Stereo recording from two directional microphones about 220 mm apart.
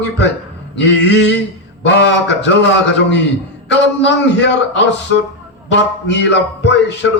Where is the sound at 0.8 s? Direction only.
50° left (ahead or behind).